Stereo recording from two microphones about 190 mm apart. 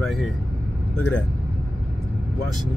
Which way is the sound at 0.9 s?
5° left (ahead or behind).